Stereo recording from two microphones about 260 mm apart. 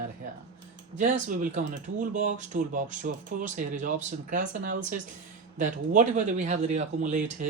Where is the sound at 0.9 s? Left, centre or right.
Right.